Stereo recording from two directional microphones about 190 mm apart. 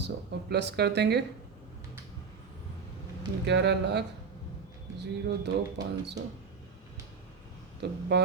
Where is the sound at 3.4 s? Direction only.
65° right (ahead or behind).